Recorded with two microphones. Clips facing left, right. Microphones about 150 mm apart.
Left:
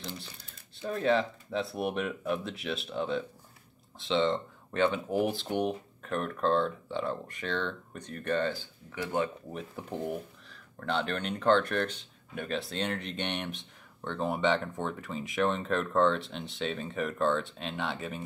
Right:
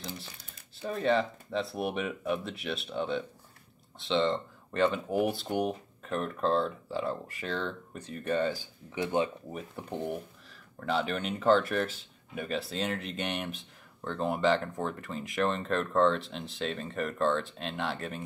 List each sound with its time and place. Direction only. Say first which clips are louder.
0.7 s speech: even; centre (ahead or behind); by 9.3 s 20° right (ahead or behind)
9.5 s speech: even; centre (ahead or behind)